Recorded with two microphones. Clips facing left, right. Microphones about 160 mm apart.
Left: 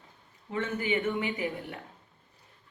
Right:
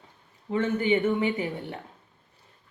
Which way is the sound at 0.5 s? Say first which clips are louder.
Right 6 dB; 35° right (ahead or behind).